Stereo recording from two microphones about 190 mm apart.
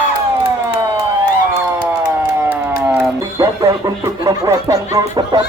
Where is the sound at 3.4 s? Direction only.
20° right (ahead or behind).